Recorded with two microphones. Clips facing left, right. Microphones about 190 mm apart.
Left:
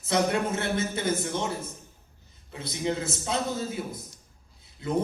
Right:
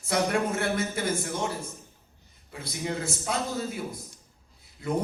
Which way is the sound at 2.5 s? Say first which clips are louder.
Left 3 dB; 25° left (ahead or behind).